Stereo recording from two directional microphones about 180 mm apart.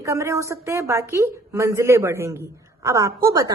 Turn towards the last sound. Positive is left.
turn(degrees=-20)  # may be behind; listen again after turning